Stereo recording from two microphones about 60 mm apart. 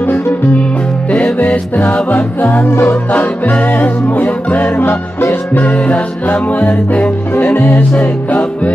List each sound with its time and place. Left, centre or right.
0.0 s music: left
1.1 s music: left
2.7 s music: left
3.1 s music: left
7.5 s music: left
8.3 s music: left